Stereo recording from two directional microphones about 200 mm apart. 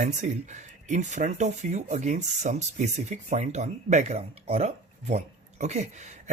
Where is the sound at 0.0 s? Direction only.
35° right (ahead or behind).